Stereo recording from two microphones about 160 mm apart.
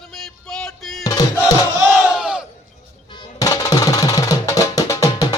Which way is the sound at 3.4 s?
20° left (ahead or behind).